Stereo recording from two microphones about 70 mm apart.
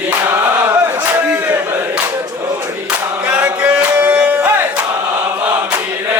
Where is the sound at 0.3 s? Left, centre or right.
Right.